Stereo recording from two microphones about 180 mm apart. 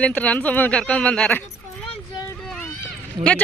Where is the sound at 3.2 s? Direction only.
5° left (ahead or behind).